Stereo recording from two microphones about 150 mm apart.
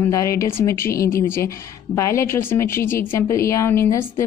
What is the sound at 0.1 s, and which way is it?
A woman's voice, 20° left (ahead or behind).